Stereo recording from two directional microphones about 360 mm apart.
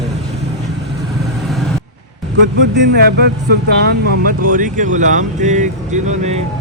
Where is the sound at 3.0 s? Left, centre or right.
Right.